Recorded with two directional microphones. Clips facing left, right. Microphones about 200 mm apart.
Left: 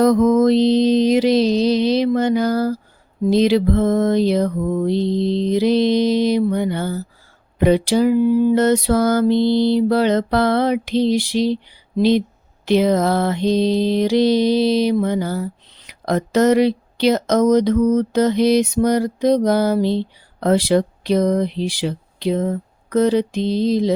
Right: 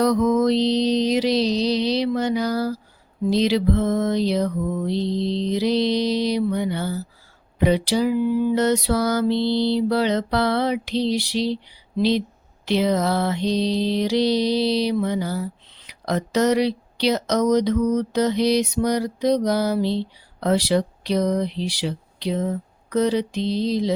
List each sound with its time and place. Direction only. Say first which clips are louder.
0.0 s mantra: left 5 dB; 50° left (ahead or behind)